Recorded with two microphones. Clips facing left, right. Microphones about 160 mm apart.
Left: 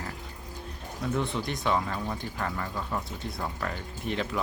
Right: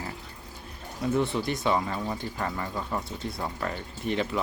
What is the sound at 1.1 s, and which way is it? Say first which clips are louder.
Speech: right 4 dB; 5° right (ahead or behind).